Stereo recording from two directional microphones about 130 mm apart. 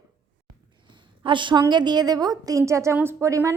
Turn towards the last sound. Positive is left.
turn(degrees=-25)  # may be behind; listen again after turning